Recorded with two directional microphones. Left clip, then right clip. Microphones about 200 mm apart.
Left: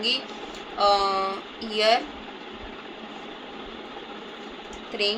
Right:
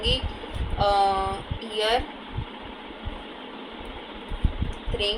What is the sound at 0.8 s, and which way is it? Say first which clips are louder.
Speech: even; 10° left (ahead or behind).